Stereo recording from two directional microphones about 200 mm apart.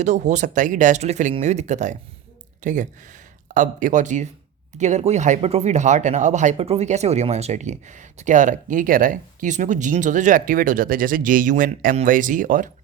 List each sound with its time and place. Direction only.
0.0 s speech: 35° right (ahead or behind)